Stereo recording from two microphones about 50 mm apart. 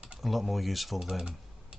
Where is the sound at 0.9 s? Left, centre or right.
Centre.